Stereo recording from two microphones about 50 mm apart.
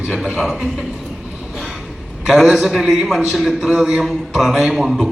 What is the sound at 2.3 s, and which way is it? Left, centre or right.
A man's voice, centre.